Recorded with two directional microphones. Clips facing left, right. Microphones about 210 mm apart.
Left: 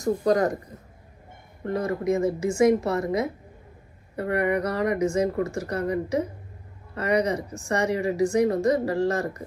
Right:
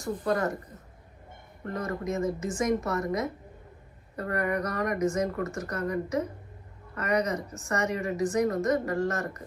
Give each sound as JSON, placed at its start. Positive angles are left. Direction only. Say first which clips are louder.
{"t": 0.0, "sound": "speech", "louder": "left 6 dB", "side_deg": 40}
{"t": 1.6, "sound": "a woman's voice", "louder": "left 6 dB", "side_deg": 30}